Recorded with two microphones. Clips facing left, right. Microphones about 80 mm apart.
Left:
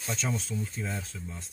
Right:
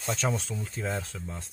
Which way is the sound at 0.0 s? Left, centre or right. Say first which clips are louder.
Right 3 dB; right.